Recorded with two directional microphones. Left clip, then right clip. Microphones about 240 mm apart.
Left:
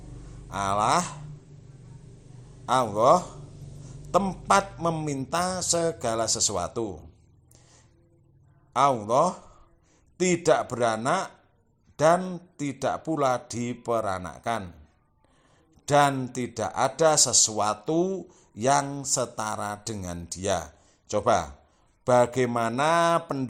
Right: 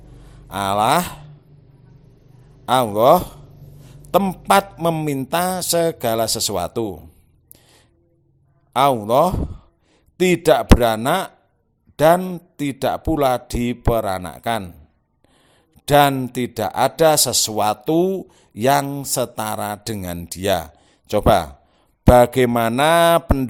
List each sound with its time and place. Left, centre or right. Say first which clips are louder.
0.4 s speech: right 7 dB; right
2.6 s speech: right 7 dB; right
7.5 s music: right 6 dB; right
8.7 s speech: right 6 dB; right
15.7 s speech: right 7 dB; right